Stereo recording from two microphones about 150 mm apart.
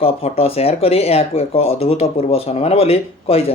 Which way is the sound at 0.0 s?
40° left (ahead or behind).